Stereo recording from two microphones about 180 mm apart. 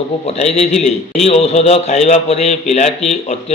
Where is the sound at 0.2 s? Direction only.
35° left (ahead or behind).